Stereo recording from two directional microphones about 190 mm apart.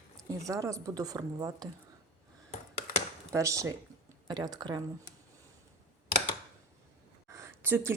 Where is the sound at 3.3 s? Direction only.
15° right (ahead or behind).